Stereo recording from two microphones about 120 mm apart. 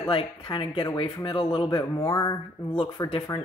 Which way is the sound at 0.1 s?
45° left (ahead or behind).